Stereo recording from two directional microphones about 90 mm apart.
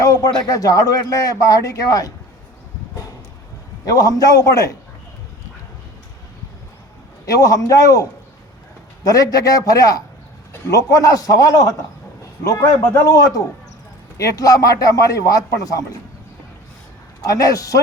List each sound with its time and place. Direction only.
0.0 s a sound: 40° left (ahead or behind)
0.4 s speech: 40° left (ahead or behind)
3.8 s speech: 40° left (ahead or behind)
7.3 s speech: 40° left (ahead or behind)
9.0 s a man's voice: 45° left (ahead or behind)
17.2 s speech: 40° left (ahead or behind)